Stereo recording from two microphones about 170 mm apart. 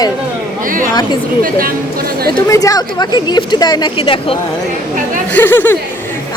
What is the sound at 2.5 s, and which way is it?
Speech, 20° left (ahead or behind).